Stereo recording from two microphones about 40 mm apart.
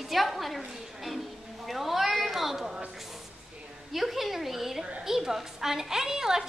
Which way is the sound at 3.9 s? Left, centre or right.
Centre.